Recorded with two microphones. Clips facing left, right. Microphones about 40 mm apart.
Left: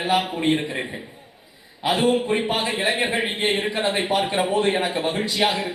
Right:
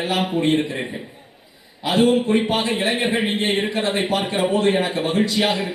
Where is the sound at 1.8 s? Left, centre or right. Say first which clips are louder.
Right 3 dB; left.